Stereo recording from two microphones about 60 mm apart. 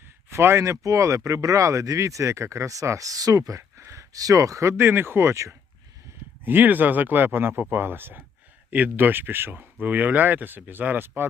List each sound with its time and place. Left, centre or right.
0.3 s speech: right
3.8 s a sound: right
4.1 s speech: right
4.8 s speech: right
6.4 s speech: right